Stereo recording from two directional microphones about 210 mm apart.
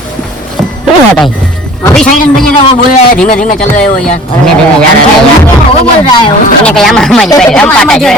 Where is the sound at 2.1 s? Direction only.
35° left (ahead or behind).